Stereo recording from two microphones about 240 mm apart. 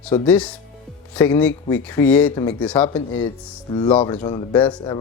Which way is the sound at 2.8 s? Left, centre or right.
Centre.